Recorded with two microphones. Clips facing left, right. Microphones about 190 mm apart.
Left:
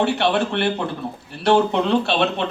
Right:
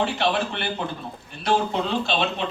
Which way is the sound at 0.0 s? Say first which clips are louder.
Left 4 dB; 65° left (ahead or behind).